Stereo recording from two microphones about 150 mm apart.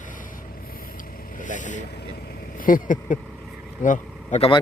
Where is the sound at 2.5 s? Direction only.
65° left (ahead or behind); by 4.5 s 50° left (ahead or behind).